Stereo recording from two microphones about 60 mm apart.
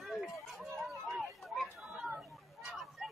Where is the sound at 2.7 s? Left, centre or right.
Centre.